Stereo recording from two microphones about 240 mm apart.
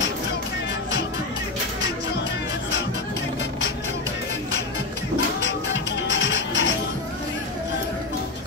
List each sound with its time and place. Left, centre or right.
5.4 s music: left